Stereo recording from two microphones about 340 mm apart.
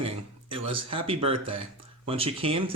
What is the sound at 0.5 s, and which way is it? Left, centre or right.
Speech, centre.